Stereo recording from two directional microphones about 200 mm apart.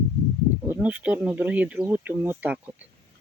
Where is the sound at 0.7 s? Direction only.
5° right (ahead or behind).